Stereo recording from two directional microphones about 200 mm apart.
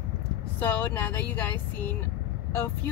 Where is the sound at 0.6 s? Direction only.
10° left (ahead or behind).